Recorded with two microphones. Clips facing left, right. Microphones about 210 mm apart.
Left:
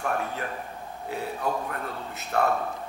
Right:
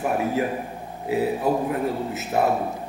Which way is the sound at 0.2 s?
5° right (ahead or behind).